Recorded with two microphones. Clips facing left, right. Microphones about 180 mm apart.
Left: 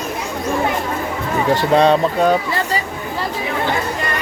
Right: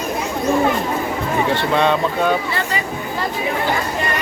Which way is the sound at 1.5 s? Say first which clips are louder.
Left 7 dB; 35° left (ahead or behind).